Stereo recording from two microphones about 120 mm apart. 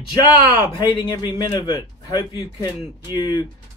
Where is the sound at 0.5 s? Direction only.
40° left (ahead or behind).